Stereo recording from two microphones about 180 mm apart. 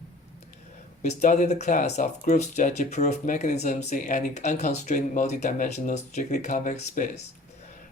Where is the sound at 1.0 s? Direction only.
40° left (ahead or behind).